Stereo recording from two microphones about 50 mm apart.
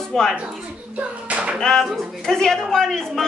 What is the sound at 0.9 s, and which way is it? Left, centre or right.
Hands, right.